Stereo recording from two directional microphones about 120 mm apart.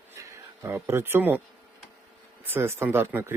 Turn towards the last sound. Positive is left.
turn(degrees=-20)  # may be behind; listen again after turning